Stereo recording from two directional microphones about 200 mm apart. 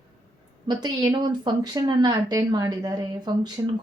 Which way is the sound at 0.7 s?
20° right (ahead or behind).